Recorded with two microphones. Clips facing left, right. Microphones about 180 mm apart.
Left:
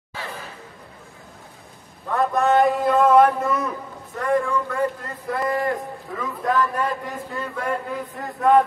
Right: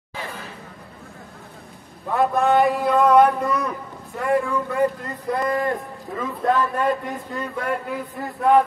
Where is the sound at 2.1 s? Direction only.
Centre (ahead or behind).